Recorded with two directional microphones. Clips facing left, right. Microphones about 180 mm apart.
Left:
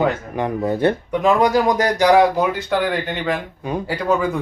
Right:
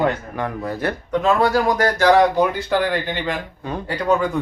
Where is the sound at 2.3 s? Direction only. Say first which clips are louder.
Right 1 dB; centre (ahead or behind).